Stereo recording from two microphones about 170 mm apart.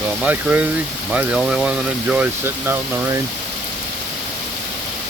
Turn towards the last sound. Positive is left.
turn(degrees=-15)  # may be behind; listen again after turning